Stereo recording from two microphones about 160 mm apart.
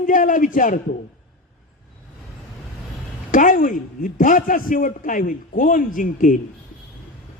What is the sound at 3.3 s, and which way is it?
A man's voice, 55° left (ahead or behind).